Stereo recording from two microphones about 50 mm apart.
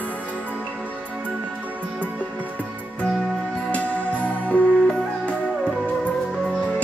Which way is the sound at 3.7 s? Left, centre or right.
Left.